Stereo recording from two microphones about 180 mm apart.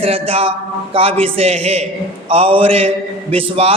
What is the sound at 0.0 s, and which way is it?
A woman's voice, 30° right (ahead or behind).